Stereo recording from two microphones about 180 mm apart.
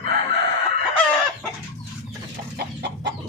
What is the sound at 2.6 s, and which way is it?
Chicken, 70° right (ahead or behind).